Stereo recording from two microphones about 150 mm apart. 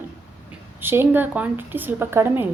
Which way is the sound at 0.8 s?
15° right (ahead or behind).